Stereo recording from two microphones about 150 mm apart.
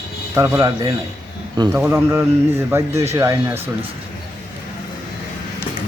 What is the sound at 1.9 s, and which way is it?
Speech, 15° right (ahead or behind).